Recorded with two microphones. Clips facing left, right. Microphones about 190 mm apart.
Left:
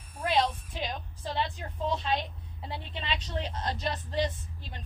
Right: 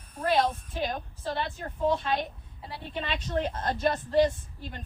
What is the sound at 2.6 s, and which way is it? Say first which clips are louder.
Speech: left 3 dB; 25° left (ahead or behind).